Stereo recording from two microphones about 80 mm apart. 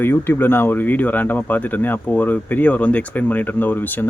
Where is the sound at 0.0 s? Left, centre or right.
Left.